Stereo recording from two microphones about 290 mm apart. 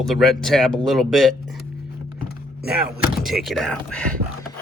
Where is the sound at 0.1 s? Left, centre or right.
Centre.